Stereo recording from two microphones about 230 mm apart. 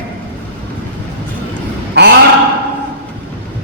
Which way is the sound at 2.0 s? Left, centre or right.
Right.